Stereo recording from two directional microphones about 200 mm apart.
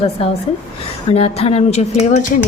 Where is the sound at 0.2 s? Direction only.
30° left (ahead or behind).